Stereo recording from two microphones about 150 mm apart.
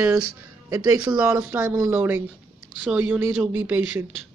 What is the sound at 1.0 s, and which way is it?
Speech, 5° right (ahead or behind).